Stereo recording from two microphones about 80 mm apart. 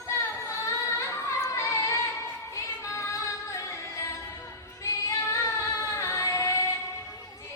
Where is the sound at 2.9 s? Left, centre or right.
Left.